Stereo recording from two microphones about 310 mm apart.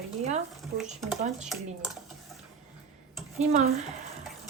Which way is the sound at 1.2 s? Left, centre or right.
Right.